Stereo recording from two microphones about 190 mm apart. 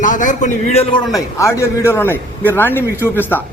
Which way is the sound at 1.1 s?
15° left (ahead or behind).